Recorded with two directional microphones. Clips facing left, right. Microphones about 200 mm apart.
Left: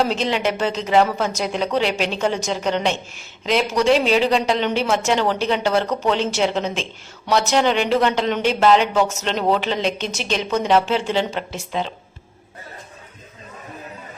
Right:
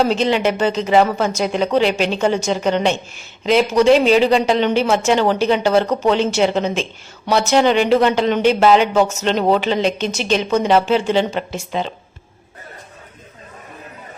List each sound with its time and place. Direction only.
0.0 s a woman's voice: centre (ahead or behind)